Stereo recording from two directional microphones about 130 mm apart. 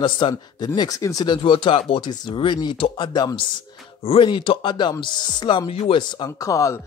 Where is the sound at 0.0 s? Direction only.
35° left (ahead or behind).